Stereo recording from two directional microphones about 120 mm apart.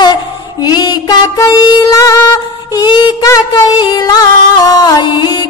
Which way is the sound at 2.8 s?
40° left (ahead or behind).